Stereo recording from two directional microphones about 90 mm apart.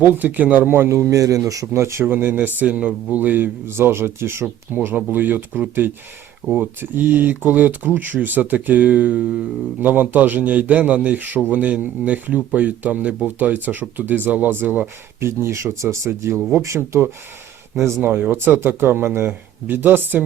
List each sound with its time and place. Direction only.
0.0 s a man's voice: 20° right (ahead or behind)